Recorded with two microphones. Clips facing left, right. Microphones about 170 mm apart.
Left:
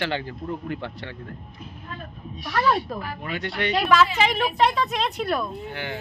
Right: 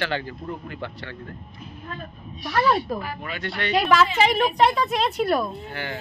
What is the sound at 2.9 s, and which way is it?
A woman's voice, 5° right (ahead or behind).